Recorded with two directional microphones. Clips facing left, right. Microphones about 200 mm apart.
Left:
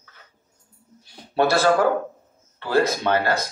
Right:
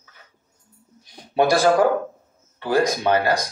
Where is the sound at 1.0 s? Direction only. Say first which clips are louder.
Right 1 dB; 15° right (ahead or behind).